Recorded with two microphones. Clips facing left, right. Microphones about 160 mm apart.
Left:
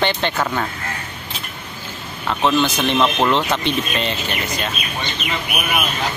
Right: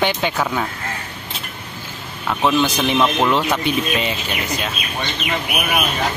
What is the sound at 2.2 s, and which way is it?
Speech, 5° right (ahead or behind).